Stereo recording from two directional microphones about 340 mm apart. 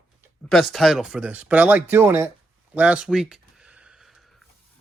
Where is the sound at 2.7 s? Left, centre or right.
Centre.